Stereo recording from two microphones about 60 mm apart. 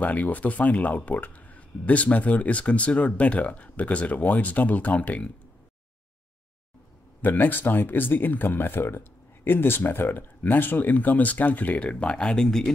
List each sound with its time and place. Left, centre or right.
0.0 s speech: left
7.2 s speech: left; by 12.7 s centre